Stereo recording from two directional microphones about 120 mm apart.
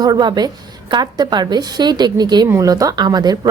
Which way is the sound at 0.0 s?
35° right (ahead or behind).